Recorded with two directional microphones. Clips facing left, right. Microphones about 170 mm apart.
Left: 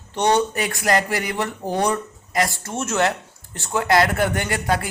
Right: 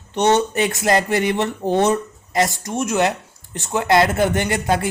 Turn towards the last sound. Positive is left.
turn(degrees=-25)  # may be behind; listen again after turning